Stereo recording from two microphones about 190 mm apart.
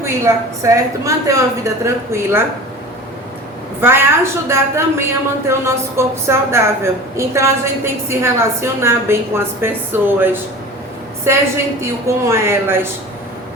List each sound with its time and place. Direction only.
0.0 s a woman's voice: 15° right (ahead or behind)
3.8 s a woman's voice: 10° right (ahead or behind)